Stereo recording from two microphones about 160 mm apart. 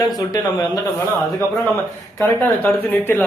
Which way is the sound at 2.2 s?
15° left (ahead or behind).